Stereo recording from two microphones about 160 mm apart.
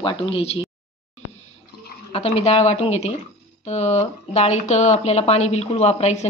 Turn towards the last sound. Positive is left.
turn(degrees=45)  # may be behind; listen again after turning